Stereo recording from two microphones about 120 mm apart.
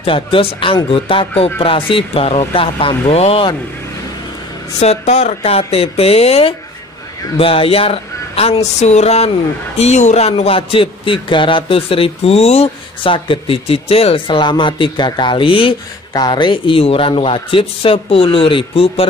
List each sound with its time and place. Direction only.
0.0 s a man's voice: 50° left (ahead or behind)
4.7 s a man's voice: 65° left (ahead or behind); by 19.0 s 50° left (ahead or behind)